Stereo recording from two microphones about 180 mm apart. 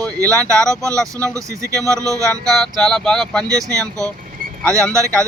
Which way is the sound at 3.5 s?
20° right (ahead or behind).